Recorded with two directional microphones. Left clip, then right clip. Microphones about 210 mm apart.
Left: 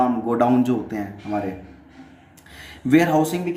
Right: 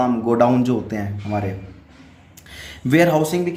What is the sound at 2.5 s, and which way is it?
Speech, 50° right (ahead or behind).